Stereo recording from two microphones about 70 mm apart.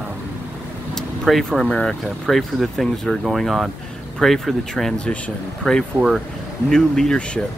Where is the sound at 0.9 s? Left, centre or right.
Centre.